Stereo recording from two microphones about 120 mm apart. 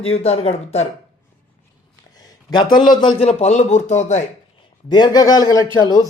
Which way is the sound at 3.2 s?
60° left (ahead or behind).